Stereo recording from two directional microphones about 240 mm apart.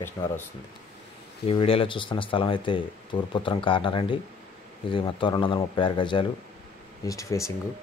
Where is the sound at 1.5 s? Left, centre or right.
Left.